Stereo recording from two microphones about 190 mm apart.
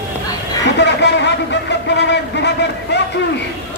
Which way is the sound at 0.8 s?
65° left (ahead or behind).